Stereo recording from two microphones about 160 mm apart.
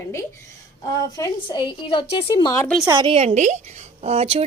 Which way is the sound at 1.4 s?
30° left (ahead or behind).